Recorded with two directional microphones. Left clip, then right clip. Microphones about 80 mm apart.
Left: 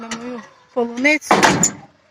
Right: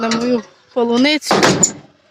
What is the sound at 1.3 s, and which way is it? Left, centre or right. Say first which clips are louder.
Speech: even; right.